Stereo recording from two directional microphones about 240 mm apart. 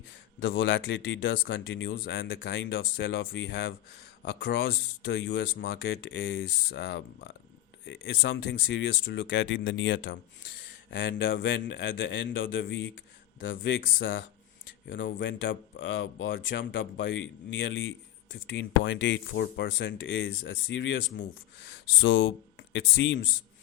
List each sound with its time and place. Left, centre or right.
0.3 s speech: left